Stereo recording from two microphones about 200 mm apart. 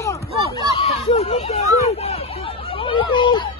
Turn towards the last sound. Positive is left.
turn(degrees=25)  # may be behind; listen again after turning